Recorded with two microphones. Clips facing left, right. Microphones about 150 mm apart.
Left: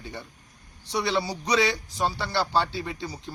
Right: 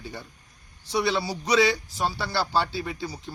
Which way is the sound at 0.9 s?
20° left (ahead or behind).